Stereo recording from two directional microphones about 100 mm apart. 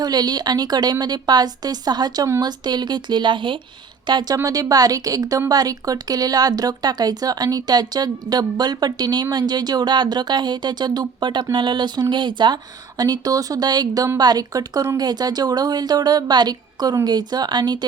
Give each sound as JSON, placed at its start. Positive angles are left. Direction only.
{"t": 0.0, "sound": "a woman's voice", "side_deg": -40}
{"t": 13.0, "sound": "speech", "side_deg": -40}